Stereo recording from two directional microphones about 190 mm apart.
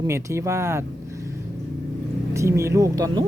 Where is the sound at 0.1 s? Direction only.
15° right (ahead or behind).